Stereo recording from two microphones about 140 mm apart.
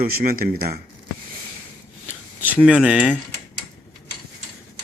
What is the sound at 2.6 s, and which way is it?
Speech, 5° right (ahead or behind).